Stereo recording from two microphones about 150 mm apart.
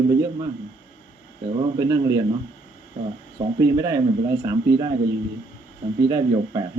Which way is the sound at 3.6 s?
20° right (ahead or behind).